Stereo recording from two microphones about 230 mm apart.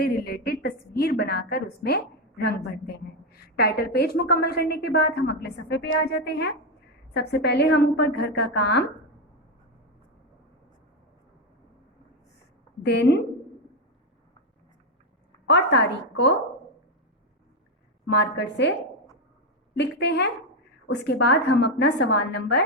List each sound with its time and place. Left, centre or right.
0.0 s a sound: left
1.1 s a woman's voice: left
3.3 s a woman's voice: left
12.8 s a woman's voice: left
15.4 s a woman's voice: left
18.1 s a woman's voice: left
19.7 s a woman's voice: left